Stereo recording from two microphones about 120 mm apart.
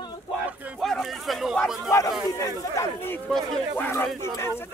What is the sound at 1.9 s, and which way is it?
Speech, 25° left (ahead or behind).